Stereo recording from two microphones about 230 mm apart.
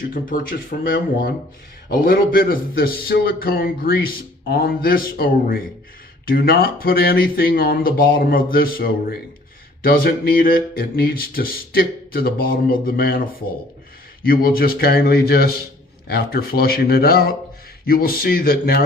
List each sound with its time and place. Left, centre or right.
0.1 s a man's voice: left
14.3 s a man's voice: left